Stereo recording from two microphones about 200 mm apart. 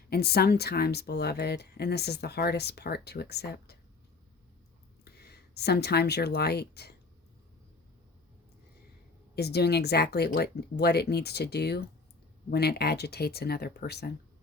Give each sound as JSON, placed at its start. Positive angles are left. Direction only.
{"t": 0.1, "sound": "speech", "side_deg": 50}
{"t": 5.5, "sound": "speech", "side_deg": 55}
{"t": 9.3, "sound": "speech", "side_deg": 55}